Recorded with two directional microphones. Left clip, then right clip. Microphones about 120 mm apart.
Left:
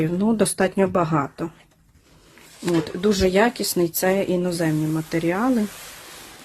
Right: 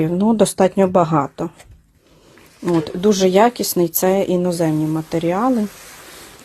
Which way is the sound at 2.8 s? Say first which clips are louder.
Right 6 dB; 30° right (ahead or behind).